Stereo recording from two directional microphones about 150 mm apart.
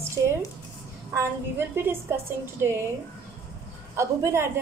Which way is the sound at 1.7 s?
15° right (ahead or behind).